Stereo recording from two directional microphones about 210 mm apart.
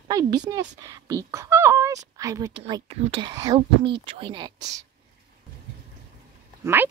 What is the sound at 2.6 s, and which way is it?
Speech, 30° right (ahead or behind).